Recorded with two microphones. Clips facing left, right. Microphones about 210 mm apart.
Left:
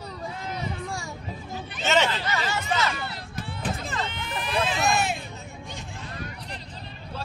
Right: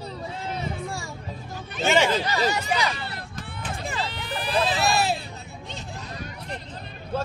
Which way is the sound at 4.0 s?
35° right (ahead or behind).